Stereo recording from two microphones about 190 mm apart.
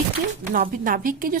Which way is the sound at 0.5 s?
50° right (ahead or behind).